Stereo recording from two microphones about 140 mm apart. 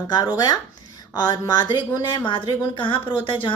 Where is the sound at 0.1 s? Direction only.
30° left (ahead or behind).